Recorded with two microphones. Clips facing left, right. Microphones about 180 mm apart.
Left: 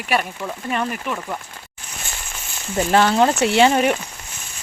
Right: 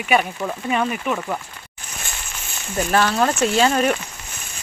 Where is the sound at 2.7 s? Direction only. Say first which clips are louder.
Left 3 dB; 25° left (ahead or behind).